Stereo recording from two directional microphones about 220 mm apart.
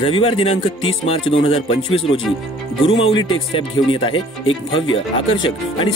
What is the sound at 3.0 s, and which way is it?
Speech, 20° left (ahead or behind).